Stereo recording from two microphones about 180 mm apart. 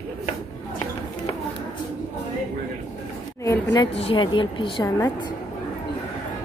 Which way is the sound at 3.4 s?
20° left (ahead or behind).